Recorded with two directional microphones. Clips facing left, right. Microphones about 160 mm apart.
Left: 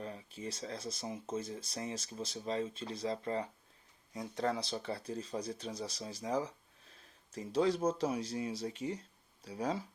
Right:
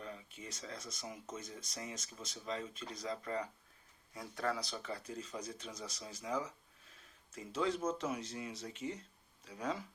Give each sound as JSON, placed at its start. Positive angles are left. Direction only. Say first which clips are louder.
{"t": 0.0, "sound": "speech", "louder": "left 5 dB", "side_deg": 35}